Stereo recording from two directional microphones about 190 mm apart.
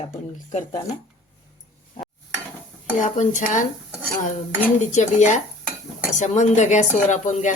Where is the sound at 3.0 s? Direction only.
40° left (ahead or behind).